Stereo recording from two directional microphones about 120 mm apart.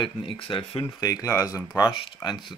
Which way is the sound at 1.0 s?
25° left (ahead or behind).